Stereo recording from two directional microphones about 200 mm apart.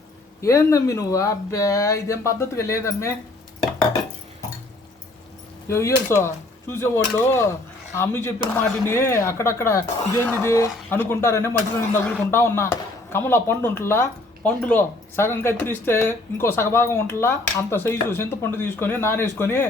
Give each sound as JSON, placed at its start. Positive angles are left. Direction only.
{"t": 0.4, "sound": "speech", "side_deg": 15}
{"t": 5.6, "sound": "speech", "side_deg": 15}